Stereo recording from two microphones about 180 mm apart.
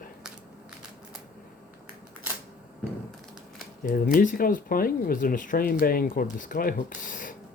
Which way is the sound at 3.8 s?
50° left (ahead or behind).